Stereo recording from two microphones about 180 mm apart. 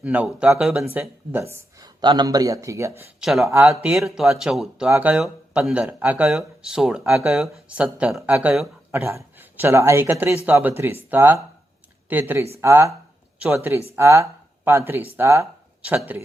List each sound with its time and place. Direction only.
0.0 s speech: 5° right (ahead or behind)